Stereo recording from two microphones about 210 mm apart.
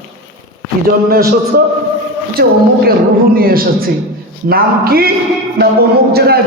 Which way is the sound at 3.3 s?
45° right (ahead or behind).